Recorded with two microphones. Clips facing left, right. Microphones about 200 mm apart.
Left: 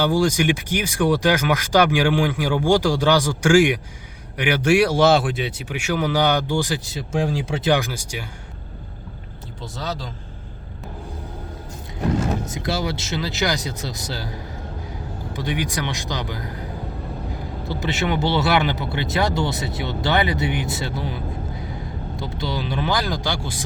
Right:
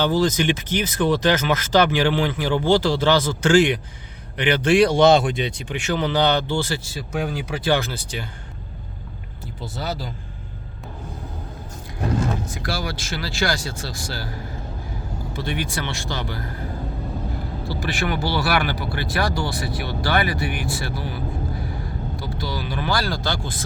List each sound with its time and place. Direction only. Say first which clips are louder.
0.0 s speech: left 1 dB; 10° left (ahead or behind)
9.6 s speech: right 1 dB; 5° right (ahead or behind)
12.5 s speech: left 3 dB; 20° left (ahead or behind)
17.7 s speech: left 2 dB; 20° left (ahead or behind)